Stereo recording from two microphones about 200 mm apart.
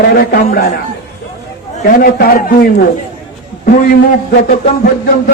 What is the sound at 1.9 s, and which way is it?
Speech, 50° left (ahead or behind).